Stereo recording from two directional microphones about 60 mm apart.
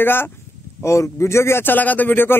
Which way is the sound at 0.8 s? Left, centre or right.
Left.